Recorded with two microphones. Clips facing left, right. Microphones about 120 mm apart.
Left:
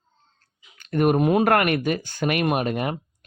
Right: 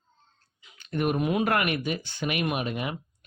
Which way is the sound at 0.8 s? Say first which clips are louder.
Left 7 dB; 50° left (ahead or behind).